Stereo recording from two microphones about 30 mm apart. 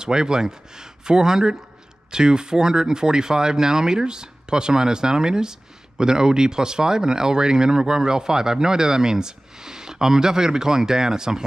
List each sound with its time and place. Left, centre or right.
0.0 s speech: right